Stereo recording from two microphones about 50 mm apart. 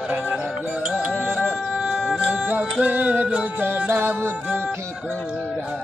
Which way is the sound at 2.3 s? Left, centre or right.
Right.